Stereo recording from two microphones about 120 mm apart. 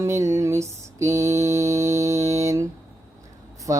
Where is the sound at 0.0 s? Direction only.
25° right (ahead or behind).